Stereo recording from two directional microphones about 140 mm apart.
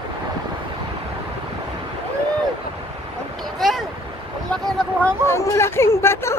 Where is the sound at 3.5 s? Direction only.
Centre (ahead or behind).